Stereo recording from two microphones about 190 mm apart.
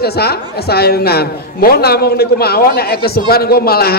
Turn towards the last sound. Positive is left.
turn(degrees=55)  # may be behind; listen again after turning